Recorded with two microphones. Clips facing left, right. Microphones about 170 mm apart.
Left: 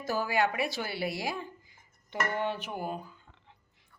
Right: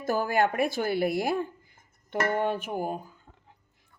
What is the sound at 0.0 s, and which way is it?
Speech, 55° right (ahead or behind).